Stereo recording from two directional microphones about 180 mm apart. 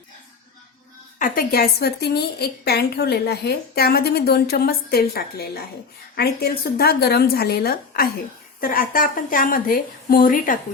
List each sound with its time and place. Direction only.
1.2 s a woman's voice: 55° left (ahead or behind)